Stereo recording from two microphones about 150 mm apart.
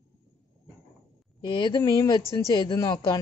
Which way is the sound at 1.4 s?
30° left (ahead or behind).